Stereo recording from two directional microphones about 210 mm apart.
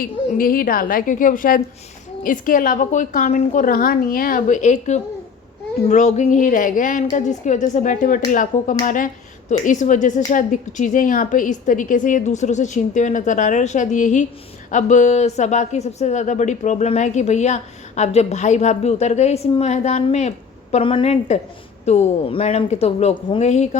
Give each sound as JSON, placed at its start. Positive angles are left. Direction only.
{"t": 0.0, "sound": "speech", "side_deg": 40}